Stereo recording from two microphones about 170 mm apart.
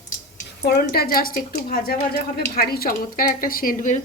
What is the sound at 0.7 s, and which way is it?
A woman's voice, 65° left (ahead or behind).